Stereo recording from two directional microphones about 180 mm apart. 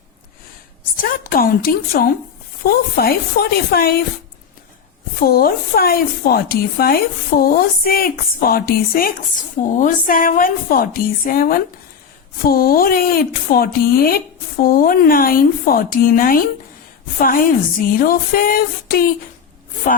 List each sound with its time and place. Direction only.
0.9 s a woman's voice: 55° left (ahead or behind)
5.2 s a woman's voice: 55° left (ahead or behind)